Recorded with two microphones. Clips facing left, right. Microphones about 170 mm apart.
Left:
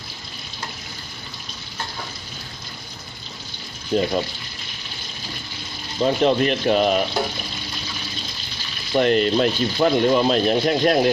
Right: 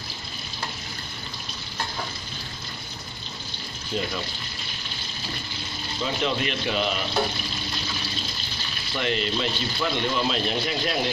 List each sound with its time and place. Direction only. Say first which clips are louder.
3.9 s speech: left 9 dB; 50° left (ahead or behind)
5.9 s speech: left 9 dB; 45° left (ahead or behind)
8.9 s speech: left 10 dB; 45° left (ahead or behind)